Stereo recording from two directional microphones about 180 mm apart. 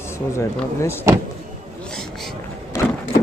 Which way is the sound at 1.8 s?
5° left (ahead or behind).